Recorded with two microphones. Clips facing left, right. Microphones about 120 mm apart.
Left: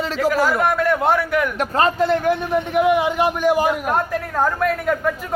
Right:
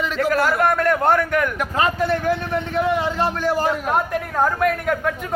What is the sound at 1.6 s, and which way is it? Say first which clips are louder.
Speech: left 3 dB; 30° left (ahead or behind).